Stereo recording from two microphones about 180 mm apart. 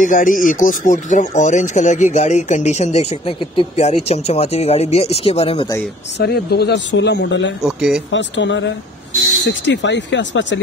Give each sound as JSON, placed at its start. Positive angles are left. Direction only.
{"t": 0.0, "sound": "speech", "side_deg": 45}
{"t": 6.1, "sound": "speech", "side_deg": 65}
{"t": 7.6, "sound": "speech", "side_deg": -5}
{"t": 8.1, "sound": "speech", "side_deg": 90}
{"t": 9.5, "sound": "speech", "side_deg": 80}